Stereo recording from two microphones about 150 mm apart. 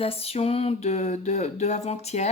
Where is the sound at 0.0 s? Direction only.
40° left (ahead or behind).